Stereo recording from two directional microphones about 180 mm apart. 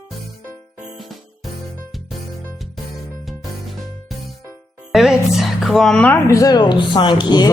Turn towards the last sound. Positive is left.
turn(degrees=25)  # may be behind; listen again after turning